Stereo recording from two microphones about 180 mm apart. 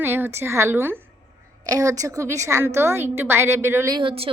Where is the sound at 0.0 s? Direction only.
10° right (ahead or behind).